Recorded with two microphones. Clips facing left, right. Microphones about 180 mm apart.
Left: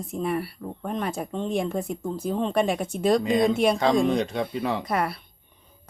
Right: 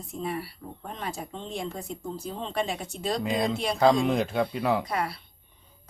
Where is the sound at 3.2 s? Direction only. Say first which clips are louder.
Left 7 dB; 5° right (ahead or behind).